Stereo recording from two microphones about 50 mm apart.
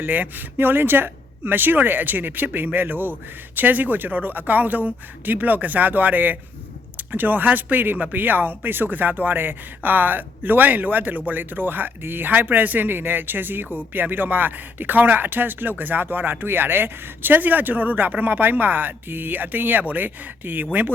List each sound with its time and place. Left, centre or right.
0.0 s speech: right